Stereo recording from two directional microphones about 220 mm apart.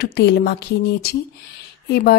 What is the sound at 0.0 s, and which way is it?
Speech, 45° left (ahead or behind).